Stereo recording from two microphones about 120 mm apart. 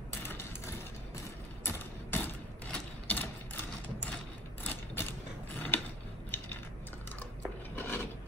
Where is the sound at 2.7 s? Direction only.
15° left (ahead or behind).